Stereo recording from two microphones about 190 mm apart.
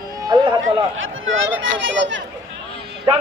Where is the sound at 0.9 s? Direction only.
90° right; by 2.2 s 70° right (ahead or behind).